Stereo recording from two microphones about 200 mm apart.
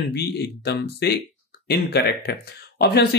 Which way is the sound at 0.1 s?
55° left (ahead or behind).